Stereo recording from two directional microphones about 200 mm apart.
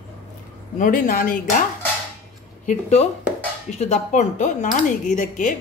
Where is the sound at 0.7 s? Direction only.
45° left (ahead or behind).